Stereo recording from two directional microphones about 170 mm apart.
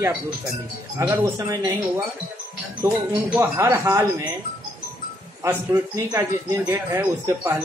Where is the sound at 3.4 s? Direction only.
15° right (ahead or behind).